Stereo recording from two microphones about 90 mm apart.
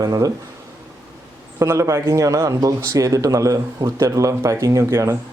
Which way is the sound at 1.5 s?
35° right (ahead or behind).